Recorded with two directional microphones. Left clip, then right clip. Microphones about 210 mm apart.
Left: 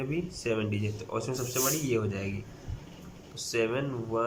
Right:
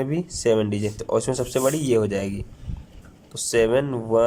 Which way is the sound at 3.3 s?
35° right (ahead or behind).